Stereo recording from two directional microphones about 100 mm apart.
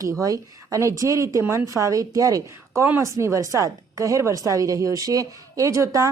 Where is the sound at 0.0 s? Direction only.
35° right (ahead or behind).